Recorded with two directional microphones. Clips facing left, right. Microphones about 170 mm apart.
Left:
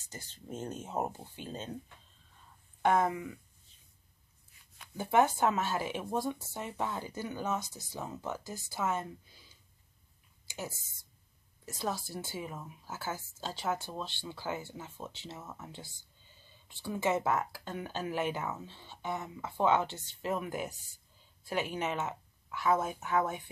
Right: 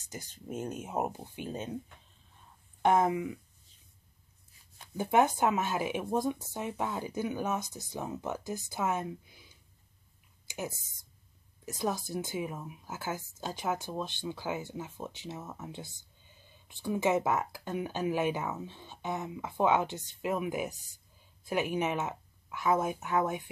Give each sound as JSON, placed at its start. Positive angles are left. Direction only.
{"t": 0.1, "sound": "speech", "side_deg": -15}
{"t": 2.8, "sound": "speech", "side_deg": -20}
{"t": 4.9, "sound": "speech", "side_deg": -15}
{"t": 10.4, "sound": "a sound", "side_deg": -20}
{"t": 11.6, "sound": "speech", "side_deg": -15}